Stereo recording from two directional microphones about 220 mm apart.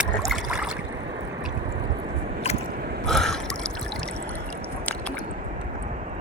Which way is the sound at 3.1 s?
Centre (ahead or behind).